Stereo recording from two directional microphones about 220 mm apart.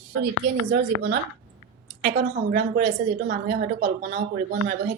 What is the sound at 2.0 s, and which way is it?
A woman's voice, 40° right (ahead or behind).